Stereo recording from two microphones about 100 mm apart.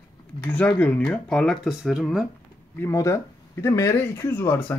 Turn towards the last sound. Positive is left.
turn(degrees=20)  # may be behind; listen again after turning